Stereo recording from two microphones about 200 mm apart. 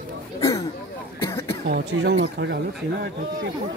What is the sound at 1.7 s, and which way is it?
Speech, 60° right (ahead or behind).